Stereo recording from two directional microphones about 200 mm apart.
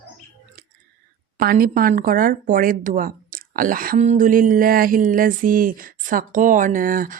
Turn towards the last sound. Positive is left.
turn(degrees=-45)  # may be behind; listen again after turning